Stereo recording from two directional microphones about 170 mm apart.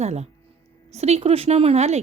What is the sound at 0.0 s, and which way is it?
A woman's voice, 40° right (ahead or behind).